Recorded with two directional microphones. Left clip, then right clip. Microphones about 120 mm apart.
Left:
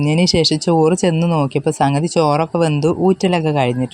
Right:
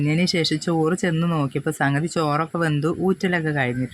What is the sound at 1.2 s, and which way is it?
Speech, 15° left (ahead or behind).